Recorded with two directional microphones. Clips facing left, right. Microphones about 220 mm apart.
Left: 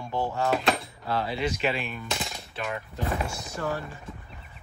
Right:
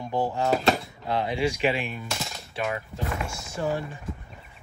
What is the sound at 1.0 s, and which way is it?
Speech, 20° right (ahead or behind).